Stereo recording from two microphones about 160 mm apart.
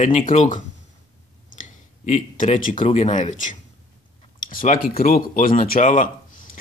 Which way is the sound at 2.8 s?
40° left (ahead or behind).